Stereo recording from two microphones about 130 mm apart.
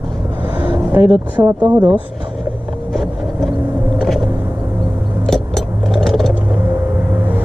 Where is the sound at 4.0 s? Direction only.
Centre (ahead or behind).